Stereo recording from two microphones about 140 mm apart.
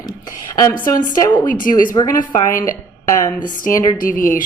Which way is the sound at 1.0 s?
30° left (ahead or behind).